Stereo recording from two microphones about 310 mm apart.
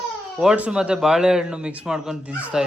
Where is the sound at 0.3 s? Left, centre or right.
Centre.